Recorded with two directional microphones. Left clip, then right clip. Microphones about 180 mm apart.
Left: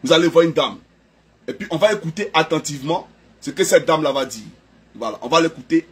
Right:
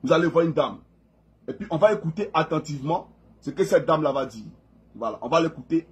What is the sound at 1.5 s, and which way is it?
A man's voice, 10° left (ahead or behind).